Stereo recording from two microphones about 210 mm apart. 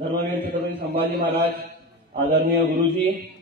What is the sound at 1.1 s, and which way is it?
Speech, 50° right (ahead or behind).